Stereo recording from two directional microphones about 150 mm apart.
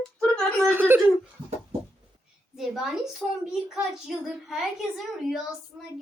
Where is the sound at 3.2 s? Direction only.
5° right (ahead or behind).